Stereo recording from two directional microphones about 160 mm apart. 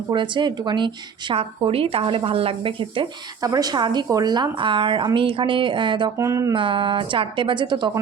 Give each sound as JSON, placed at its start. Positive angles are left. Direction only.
{"t": 0.1, "sound": "speech", "side_deg": -30}
{"t": 6.1, "sound": "speech", "side_deg": -20}
{"t": 6.5, "sound": "speech", "side_deg": -30}